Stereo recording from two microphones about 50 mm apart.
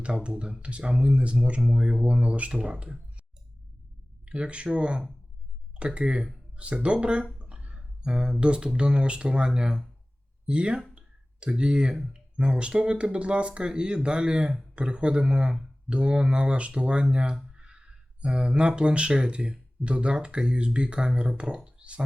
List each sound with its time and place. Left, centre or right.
0.0 s speech: right
4.3 s speech: right
10.9 s a sound: right
12.4 s speech: centre
17.5 s a sound: centre
18.8 s speech: right